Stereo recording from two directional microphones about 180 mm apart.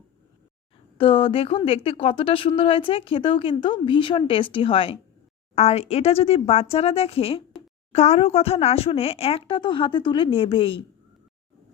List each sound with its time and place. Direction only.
0.9 s a woman's voice: 30° left (ahead or behind)